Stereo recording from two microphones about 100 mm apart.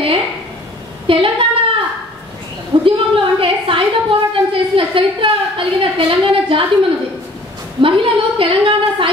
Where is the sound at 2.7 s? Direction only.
45° right (ahead or behind).